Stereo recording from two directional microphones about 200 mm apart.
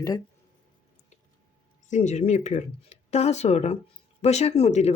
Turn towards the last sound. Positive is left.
turn(degrees=30)  # may be behind; listen again after turning